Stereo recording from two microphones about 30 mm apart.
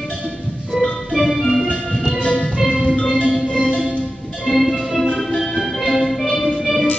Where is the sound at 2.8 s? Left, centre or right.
Left.